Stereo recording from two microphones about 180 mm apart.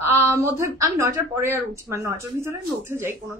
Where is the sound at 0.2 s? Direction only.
15° right (ahead or behind).